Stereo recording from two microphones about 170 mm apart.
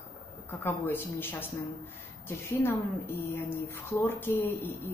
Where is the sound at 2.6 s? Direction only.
15° left (ahead or behind).